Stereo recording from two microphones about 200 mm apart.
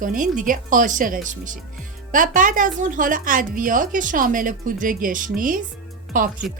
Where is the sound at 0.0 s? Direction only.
40° right (ahead or behind).